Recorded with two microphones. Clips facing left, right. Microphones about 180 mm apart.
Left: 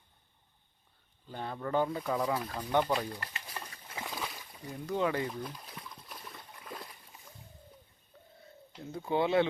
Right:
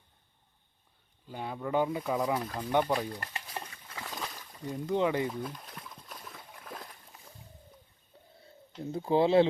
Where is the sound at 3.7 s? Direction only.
25° left (ahead or behind).